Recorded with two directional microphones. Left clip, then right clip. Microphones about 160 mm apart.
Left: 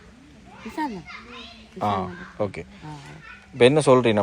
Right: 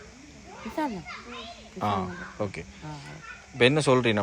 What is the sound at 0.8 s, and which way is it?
Speech, 40° right (ahead or behind).